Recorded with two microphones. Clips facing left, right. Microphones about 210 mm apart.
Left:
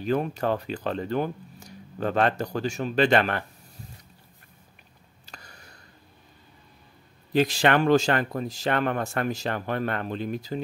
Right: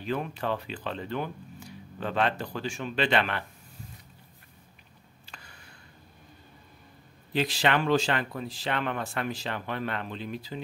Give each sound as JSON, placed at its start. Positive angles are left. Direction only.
{"t": 0.0, "sound": "speech", "side_deg": 40}
{"t": 5.2, "sound": "a sound", "side_deg": 40}
{"t": 7.3, "sound": "speech", "side_deg": 45}